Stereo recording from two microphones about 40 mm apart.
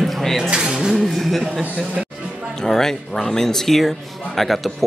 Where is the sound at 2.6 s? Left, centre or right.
Centre.